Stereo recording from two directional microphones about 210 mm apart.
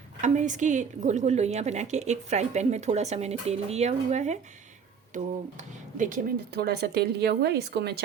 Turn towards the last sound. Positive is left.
turn(degrees=-50)  # may be behind; listen again after turning